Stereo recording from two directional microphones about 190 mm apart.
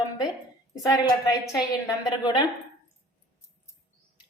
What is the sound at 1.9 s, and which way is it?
Speech, 25° left (ahead or behind).